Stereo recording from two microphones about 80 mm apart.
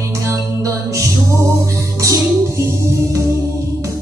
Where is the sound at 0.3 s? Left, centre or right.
Right.